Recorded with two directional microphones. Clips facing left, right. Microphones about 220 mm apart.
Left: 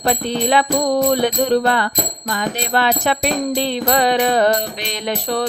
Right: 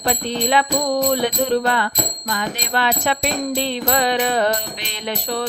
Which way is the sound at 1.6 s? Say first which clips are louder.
Left 3 dB; 45° left (ahead or behind).